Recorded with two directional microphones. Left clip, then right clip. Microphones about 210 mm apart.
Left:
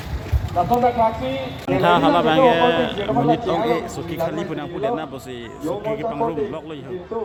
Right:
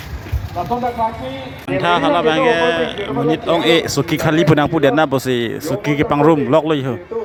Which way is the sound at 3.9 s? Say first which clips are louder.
Right 8 dB; 35° right (ahead or behind).